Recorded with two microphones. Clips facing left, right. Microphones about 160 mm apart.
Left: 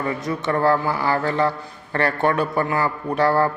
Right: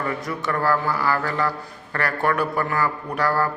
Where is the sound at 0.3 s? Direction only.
25° left (ahead or behind).